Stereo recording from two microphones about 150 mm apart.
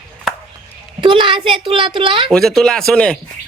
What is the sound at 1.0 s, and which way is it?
A woman's voice, 35° right (ahead or behind).